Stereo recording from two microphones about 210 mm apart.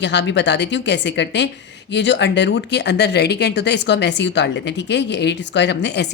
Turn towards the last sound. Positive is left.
turn(degrees=55)  # may be behind; listen again after turning